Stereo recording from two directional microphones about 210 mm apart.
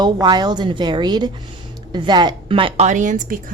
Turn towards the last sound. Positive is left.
turn(degrees=-40)  # may be behind; listen again after turning